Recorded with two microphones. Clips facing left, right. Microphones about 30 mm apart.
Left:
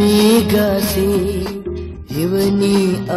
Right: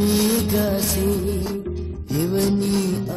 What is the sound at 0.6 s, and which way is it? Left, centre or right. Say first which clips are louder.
Music: left 6 dB; left.